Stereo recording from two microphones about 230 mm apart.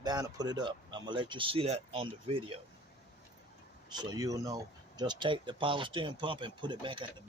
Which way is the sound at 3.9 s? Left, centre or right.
Centre.